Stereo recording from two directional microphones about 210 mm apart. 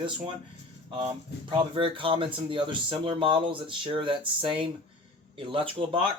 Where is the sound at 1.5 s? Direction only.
25° right (ahead or behind).